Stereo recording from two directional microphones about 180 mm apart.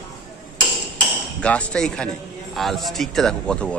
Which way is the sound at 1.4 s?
5° left (ahead or behind).